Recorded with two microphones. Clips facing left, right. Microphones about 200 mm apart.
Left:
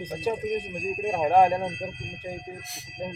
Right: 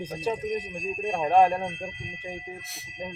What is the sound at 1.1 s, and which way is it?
Speech, 10° left (ahead or behind).